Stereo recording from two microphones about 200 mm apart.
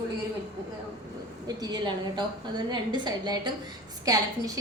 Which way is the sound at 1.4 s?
20° right (ahead or behind).